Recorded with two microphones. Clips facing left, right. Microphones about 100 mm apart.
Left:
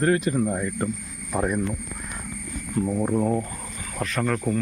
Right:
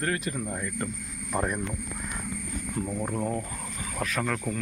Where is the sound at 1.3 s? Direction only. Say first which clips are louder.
Left 4 dB; 5° left (ahead or behind).